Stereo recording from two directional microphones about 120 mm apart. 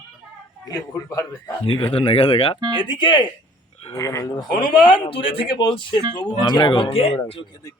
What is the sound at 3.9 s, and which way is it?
Speech, 25° left (ahead or behind).